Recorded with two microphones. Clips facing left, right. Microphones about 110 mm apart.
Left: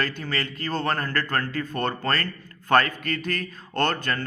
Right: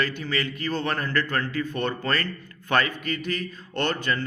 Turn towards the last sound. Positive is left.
turn(degrees=45)  # may be behind; listen again after turning